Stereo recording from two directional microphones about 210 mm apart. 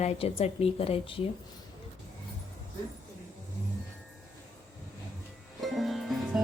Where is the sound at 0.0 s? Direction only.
30° left (ahead or behind).